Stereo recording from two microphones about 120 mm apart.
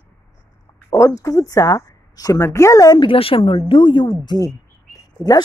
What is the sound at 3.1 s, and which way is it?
A woman's voice, 50° left (ahead or behind).